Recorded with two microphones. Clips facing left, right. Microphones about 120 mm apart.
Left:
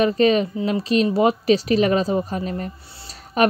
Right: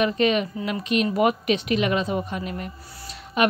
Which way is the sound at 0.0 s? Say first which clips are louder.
Left 4 dB; 35° left (ahead or behind).